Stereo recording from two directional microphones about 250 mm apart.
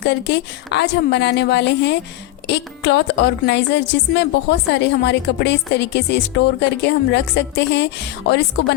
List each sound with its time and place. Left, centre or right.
0.0 s a woman's voice: left